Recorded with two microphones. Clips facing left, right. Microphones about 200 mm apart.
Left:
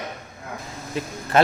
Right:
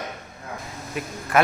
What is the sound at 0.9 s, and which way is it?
Speech, 30° left (ahead or behind).